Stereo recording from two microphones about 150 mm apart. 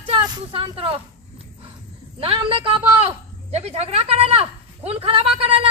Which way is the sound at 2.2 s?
40° right (ahead or behind).